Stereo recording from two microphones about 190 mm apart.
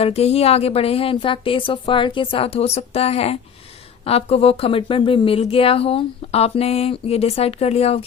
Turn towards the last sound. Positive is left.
turn(degrees=30)  # may be behind; listen again after turning